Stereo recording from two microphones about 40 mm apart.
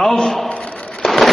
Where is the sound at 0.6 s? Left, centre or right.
Centre.